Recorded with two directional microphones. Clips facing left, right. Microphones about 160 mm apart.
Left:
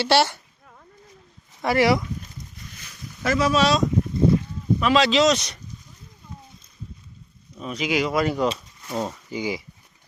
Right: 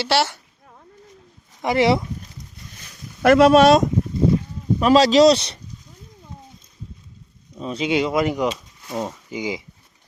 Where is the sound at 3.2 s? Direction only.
60° right (ahead or behind).